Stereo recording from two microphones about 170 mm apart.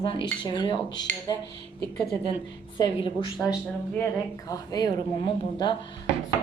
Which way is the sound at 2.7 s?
25° left (ahead or behind).